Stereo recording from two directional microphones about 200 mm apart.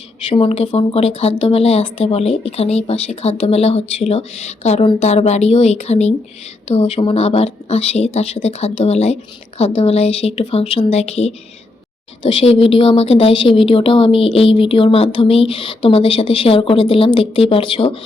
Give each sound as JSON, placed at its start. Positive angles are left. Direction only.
{"t": 0.3, "sound": "speech", "side_deg": 30}
{"t": 12.5, "sound": "speech", "side_deg": 30}